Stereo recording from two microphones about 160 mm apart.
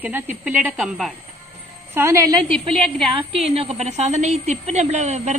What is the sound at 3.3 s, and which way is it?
Speech, 40° right (ahead or behind).